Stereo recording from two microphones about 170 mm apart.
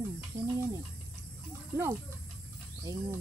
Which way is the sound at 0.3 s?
15° right (ahead or behind).